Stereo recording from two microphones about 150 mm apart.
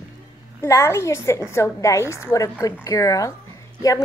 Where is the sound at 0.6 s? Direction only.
15° left (ahead or behind).